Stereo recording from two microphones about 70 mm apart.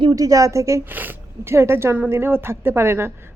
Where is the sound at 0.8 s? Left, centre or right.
Right.